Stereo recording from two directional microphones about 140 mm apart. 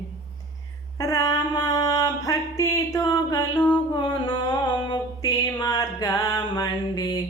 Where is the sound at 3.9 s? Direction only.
30° left (ahead or behind).